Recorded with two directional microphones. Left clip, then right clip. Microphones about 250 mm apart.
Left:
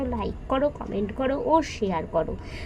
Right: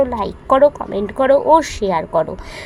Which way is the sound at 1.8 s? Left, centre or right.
Right.